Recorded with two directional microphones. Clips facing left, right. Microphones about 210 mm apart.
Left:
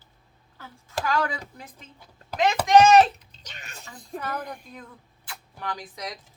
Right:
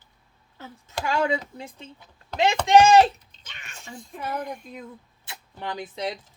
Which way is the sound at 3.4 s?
40° left (ahead or behind).